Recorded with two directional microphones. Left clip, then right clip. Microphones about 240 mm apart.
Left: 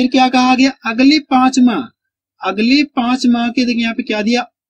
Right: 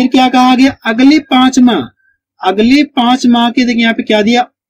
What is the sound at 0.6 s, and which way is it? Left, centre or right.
Speech, centre.